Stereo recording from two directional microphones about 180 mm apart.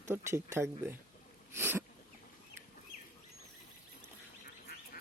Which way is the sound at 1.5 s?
10° right (ahead or behind).